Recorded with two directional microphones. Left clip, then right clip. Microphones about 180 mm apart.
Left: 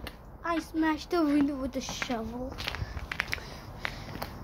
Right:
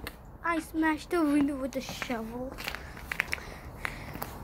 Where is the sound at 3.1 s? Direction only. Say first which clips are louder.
Right 1 dB; 25° right (ahead or behind).